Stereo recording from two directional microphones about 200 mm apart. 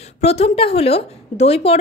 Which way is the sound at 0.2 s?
30° left (ahead or behind).